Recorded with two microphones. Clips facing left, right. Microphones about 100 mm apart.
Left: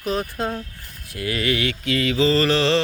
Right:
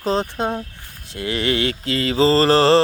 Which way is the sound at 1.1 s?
25° right (ahead or behind).